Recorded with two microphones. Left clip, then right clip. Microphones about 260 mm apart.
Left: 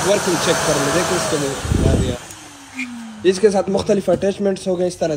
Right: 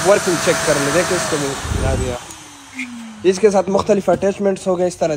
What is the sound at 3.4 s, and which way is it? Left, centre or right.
Speech, centre.